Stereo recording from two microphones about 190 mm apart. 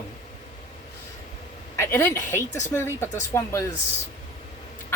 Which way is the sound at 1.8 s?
10° left (ahead or behind).